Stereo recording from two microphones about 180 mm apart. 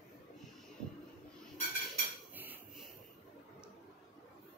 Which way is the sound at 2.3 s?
10° right (ahead or behind).